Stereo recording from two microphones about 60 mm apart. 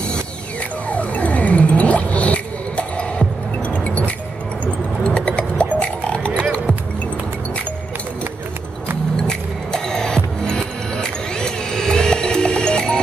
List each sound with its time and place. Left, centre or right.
0.8 s music: left
5.0 s a sound: centre
9.3 s music: centre